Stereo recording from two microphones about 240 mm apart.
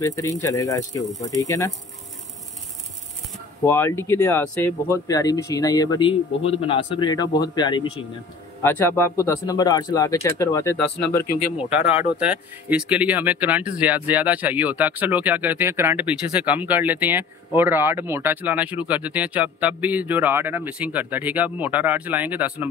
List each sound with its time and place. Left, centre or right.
0.0 s speech: centre
3.6 s speech: centre
11.5 s speech: centre